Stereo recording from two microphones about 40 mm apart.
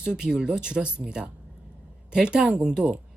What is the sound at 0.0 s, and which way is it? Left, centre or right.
A woman's voice, centre.